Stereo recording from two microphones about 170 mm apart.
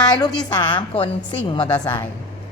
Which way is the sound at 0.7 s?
30° left (ahead or behind).